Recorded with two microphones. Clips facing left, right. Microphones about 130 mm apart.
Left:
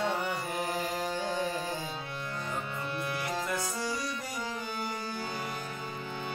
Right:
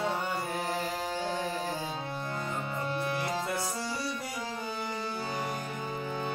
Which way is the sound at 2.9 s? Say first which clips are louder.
Right 3 dB; 35° right (ahead or behind).